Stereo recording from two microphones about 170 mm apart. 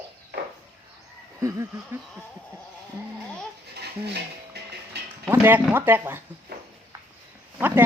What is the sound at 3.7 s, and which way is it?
Dishes, 75° right (ahead or behind).